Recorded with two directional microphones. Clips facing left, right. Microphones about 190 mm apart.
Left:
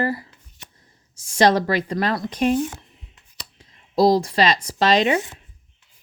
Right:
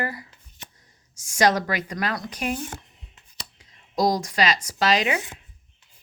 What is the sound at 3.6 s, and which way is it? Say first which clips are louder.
Speech: left 6 dB; 30° left (ahead or behind).